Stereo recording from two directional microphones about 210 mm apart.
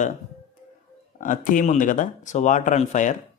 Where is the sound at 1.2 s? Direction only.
40° left (ahead or behind).